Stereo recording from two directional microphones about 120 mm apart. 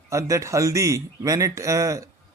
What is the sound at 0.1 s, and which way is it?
Speech, 25° right (ahead or behind).